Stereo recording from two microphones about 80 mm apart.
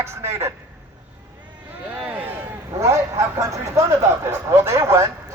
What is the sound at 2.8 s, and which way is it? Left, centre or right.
A man's voice, right.